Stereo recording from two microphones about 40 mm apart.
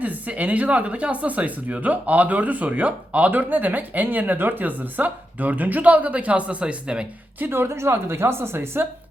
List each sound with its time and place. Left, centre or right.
0.0 s speech: right
7.3 s a woman's voice: right